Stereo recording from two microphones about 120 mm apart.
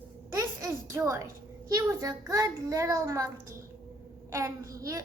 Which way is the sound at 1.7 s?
25° right (ahead or behind).